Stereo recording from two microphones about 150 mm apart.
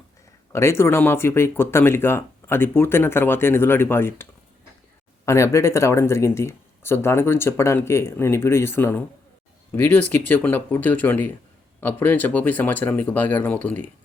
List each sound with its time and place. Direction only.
0.5 s speech: 20° left (ahead or behind)